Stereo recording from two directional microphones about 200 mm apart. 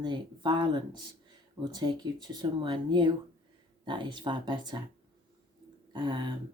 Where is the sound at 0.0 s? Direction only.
25° right (ahead or behind).